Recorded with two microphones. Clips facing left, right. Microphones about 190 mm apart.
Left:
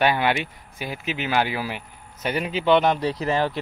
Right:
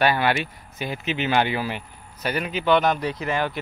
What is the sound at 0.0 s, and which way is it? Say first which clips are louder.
Speech: even; 15° left (ahead or behind).